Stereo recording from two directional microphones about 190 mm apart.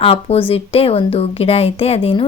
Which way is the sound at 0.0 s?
30° left (ahead or behind).